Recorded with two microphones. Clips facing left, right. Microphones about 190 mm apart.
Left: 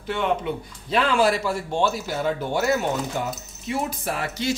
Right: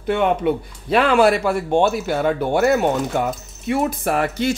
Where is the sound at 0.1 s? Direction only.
55° right (ahead or behind).